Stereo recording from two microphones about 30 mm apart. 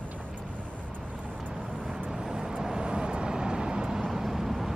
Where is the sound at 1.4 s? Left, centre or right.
Right.